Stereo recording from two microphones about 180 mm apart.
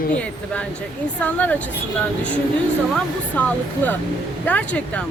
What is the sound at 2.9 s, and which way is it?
Speech, 5° left (ahead or behind).